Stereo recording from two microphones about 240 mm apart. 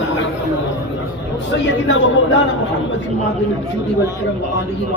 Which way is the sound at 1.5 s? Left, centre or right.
Left.